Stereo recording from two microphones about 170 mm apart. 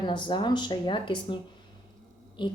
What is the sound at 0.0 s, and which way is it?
Speech, 25° left (ahead or behind).